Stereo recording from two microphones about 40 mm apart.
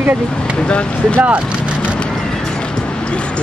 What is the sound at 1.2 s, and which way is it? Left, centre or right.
Vehicle, right.